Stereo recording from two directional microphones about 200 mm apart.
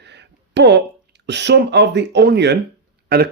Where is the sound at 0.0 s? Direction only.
60° right (ahead or behind).